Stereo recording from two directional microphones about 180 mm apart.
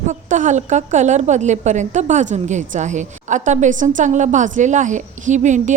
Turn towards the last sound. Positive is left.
turn(degrees=-40)  # may be behind; listen again after turning